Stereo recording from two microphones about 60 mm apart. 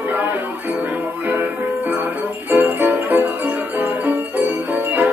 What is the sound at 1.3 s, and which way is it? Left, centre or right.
Music, right.